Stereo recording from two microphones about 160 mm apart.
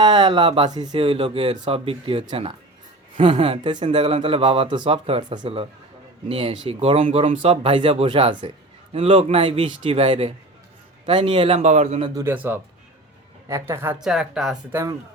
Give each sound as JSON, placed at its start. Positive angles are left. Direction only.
{"t": 0.0, "sound": "speech", "side_deg": -30}
{"t": 12.2, "sound": "a woman's voice", "side_deg": -10}
{"t": 14.0, "sound": "speech", "side_deg": -5}
{"t": 14.7, "sound": "a woman's voice", "side_deg": -20}